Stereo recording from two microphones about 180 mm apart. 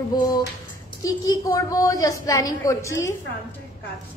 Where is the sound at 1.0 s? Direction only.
20° left (ahead or behind).